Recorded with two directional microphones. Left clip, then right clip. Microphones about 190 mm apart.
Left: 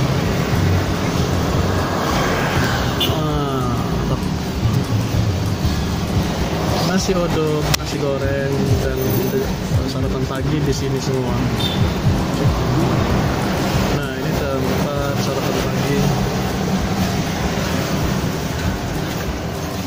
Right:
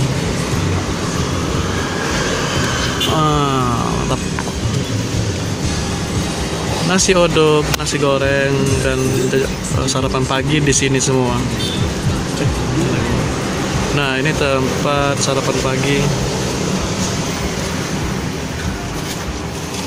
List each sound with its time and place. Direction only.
6.9 s speech: 15° right (ahead or behind)
10.3 s speech: 15° right (ahead or behind)